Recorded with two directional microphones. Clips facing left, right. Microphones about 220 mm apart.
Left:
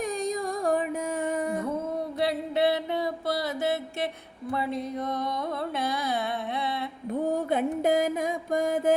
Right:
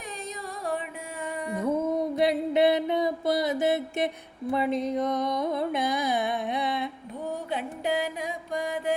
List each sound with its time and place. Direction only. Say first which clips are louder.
2.2 s mantra: right 2 dB; 15° right (ahead or behind)
4.5 s a sound: right 4 dB; 20° right (ahead or behind)
7.5 s music: left 4 dB; 45° left (ahead or behind)